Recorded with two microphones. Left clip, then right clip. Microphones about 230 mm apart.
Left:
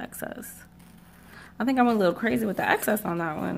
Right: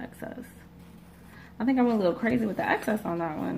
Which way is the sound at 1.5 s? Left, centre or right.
Left.